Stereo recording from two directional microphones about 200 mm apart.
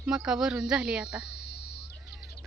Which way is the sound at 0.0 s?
5° right (ahead or behind).